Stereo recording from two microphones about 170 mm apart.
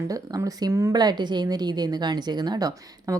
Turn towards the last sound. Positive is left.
turn(degrees=-20)  # may be behind; listen again after turning